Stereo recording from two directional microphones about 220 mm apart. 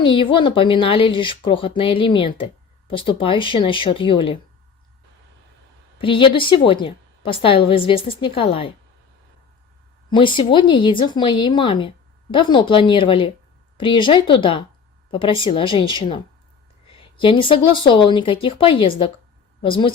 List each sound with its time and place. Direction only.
0.0 s speech: 25° left (ahead or behind)
6.0 s speech: 25° left (ahead or behind)
10.1 s speech: 20° left (ahead or behind)